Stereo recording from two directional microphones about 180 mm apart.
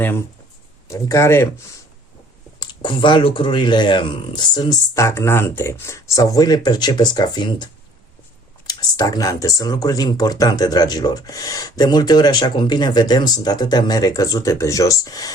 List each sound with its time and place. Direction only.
0.9 s speech: 15° left (ahead or behind)
2.6 s speech: 25° left (ahead or behind)